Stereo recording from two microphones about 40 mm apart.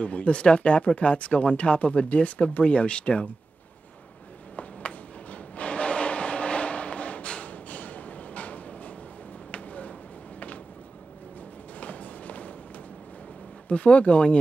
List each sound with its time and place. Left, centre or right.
0.0 s speech: left
4.6 s a sound: left
11.8 s run: left
13.7 s speech: left